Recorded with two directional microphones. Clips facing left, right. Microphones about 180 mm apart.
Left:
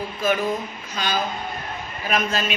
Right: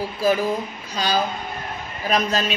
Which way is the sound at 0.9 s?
35° right (ahead or behind).